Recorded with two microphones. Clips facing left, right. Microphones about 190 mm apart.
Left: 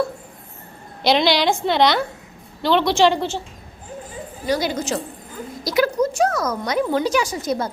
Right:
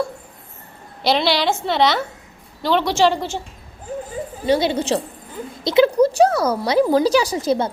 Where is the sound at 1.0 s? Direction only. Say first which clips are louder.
Left 1 dB; 5° right (ahead or behind).